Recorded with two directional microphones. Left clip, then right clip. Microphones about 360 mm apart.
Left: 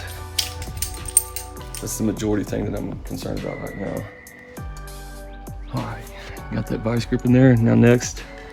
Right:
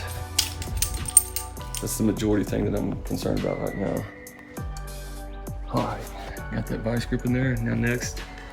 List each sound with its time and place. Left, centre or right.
0.0 s music: centre
1.8 s speech: centre
6.3 s speech: centre